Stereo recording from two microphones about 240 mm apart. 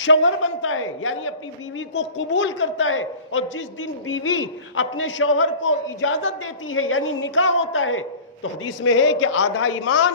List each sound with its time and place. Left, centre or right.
0.0 s a man's voice: left